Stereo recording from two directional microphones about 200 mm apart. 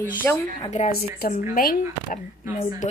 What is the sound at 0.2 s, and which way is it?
Speech, 10° left (ahead or behind).